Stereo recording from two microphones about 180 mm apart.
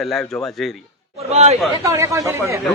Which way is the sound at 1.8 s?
15° right (ahead or behind).